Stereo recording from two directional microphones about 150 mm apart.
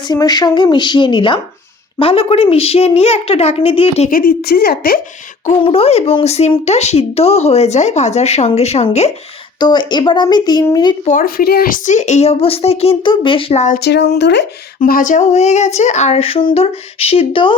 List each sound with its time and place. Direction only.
0.1 s a woman's voice: 25° left (ahead or behind); by 4.1 s 40° left (ahead or behind)
4.1 s a woman's voice: 80° left
5.5 s speech: 40° left (ahead or behind)
9.6 s speech: 30° left (ahead or behind)
11.0 s a woman's voice: 60° left (ahead or behind); by 11.8 s 85° left
11.9 s a woman's voice: 50° left (ahead or behind)
13.7 s a woman's voice: 90° left
14.8 s a woman's voice: 65° left (ahead or behind); by 17.6 s 35° left (ahead or behind)